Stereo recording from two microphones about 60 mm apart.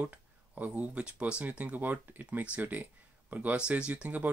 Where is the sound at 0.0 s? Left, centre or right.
Right.